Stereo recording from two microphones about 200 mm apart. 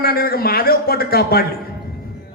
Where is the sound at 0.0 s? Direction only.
50° left (ahead or behind).